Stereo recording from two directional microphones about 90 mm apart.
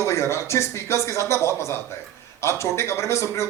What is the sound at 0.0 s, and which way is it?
Speech, 30° left (ahead or behind).